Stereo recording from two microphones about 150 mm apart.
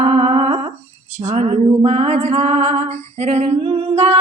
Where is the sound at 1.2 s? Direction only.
50° right (ahead or behind).